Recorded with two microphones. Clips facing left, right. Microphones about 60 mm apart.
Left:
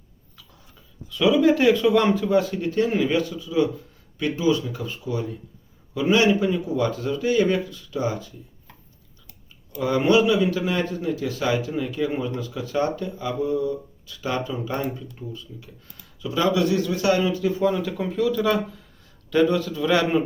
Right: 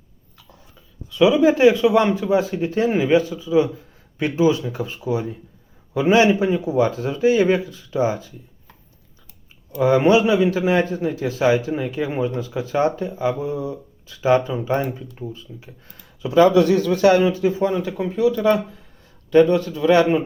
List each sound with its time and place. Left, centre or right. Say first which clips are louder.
1.1 s speech: right 3 dB; centre; by 5.2 s right
5.9 s a man's voice: right 4 dB; right
6.7 s speech: right 4 dB; centre
9.7 s a man's voice: right 4 dB; right
16.2 s a man's voice: right 8 dB; right
17.6 s speech: right 2 dB; centre